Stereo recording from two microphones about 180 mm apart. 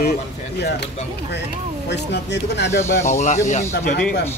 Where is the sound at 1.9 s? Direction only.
70° left (ahead or behind).